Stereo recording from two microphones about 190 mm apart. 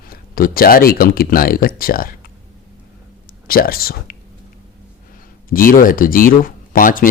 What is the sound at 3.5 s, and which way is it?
Speech, 50° left (ahead or behind).